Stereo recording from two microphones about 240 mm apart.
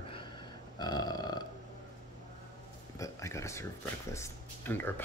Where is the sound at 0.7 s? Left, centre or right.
Centre.